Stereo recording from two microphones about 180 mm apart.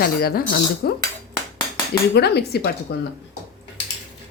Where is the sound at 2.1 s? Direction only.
65° left (ahead or behind).